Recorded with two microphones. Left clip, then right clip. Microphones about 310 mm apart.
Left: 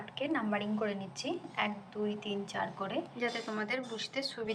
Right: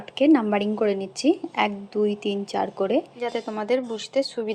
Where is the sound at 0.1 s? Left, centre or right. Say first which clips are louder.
Right 15 dB; centre.